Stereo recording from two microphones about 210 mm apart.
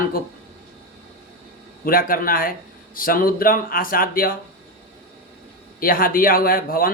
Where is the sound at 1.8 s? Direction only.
45° left (ahead or behind).